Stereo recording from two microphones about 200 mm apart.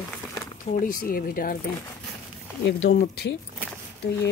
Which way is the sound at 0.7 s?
45° left (ahead or behind).